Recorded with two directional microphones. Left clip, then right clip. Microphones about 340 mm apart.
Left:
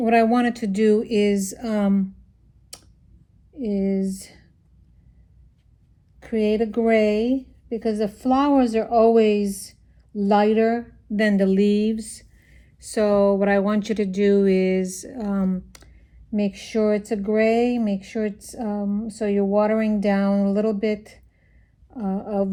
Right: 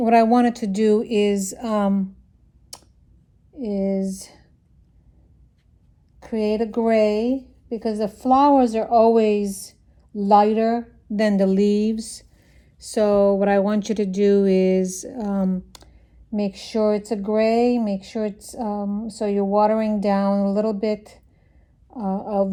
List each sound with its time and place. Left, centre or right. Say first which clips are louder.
0.0 s speech: right 2 dB; centre
1.3 s a woman's voice: even; right
1.5 s speech: right 2 dB; centre
3.5 s speech: right 1 dB; centre
6.4 s a woman's voice: even; right
9.0 s speech: even; centre
10.3 s speech: right 2 dB; right
11.3 s speech: right 1 dB; centre
18.8 s a woman's voice: even; right
19.0 s speech: even; centre